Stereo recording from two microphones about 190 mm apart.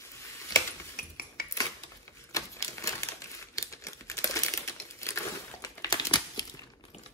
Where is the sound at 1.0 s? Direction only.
55° left (ahead or behind).